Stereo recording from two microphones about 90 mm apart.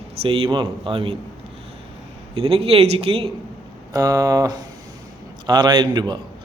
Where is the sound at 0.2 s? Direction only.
80° right.